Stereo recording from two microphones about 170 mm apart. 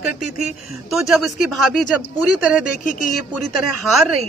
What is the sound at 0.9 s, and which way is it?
Speech, centre (ahead or behind).